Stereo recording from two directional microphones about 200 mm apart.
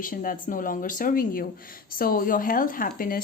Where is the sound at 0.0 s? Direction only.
45° left (ahead or behind).